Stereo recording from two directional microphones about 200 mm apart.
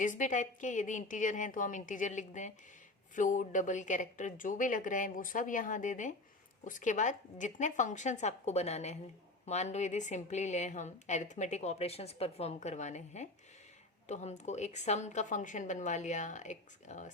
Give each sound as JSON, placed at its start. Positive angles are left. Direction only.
{"t": 0.0, "sound": "a woman's voice", "side_deg": 40}